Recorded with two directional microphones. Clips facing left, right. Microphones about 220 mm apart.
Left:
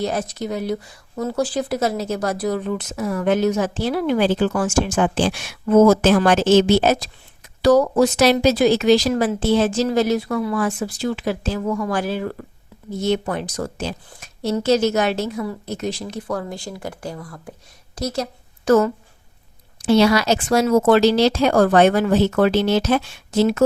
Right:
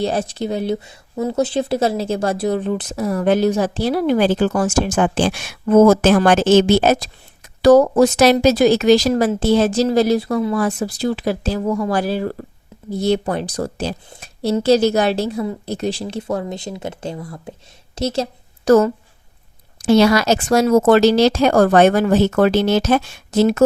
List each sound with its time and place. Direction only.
0.0 s a woman's voice: 30° right (ahead or behind)
18.6 s speech: 40° right (ahead or behind)